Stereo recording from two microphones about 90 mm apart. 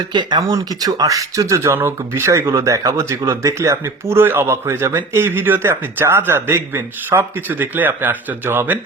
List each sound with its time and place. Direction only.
0.1 s speech: 55° right (ahead or behind); by 8.8 s 20° right (ahead or behind)